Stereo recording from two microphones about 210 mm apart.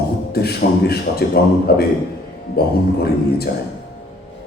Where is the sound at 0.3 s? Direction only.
50° left (ahead or behind).